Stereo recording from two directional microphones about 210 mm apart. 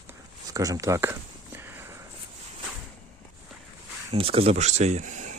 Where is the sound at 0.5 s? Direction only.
15° right (ahead or behind).